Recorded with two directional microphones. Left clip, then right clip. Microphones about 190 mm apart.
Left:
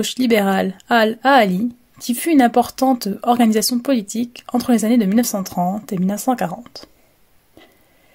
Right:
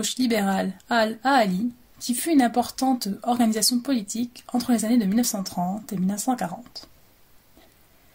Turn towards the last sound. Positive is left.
turn(degrees=50)  # may be behind; listen again after turning